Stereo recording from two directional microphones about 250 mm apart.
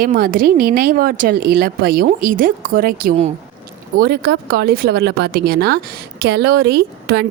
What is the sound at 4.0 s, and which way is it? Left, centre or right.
Speech, right.